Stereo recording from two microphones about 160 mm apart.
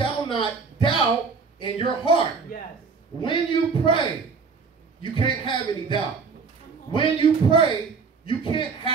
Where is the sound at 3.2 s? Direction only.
30° left (ahead or behind).